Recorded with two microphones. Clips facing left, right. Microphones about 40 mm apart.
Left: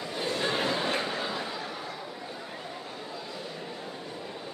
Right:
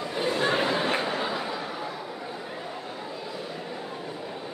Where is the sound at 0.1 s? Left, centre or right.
Centre.